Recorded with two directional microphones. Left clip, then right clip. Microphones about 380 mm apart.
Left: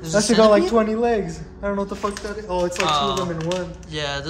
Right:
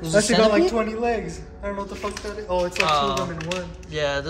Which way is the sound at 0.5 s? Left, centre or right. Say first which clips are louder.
Left 4 dB; left.